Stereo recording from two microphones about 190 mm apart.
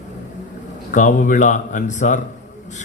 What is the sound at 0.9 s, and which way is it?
A man's voice, 40° left (ahead or behind).